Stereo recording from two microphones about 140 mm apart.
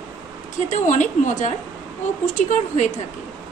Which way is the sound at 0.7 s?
60° left (ahead or behind).